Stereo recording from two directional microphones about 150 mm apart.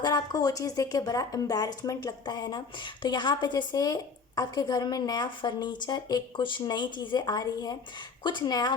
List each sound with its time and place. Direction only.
0.0 s speech: 25° left (ahead or behind)